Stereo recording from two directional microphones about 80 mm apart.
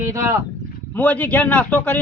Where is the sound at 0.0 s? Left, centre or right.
Right.